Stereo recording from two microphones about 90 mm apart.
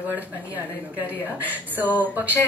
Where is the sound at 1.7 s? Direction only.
20° right (ahead or behind).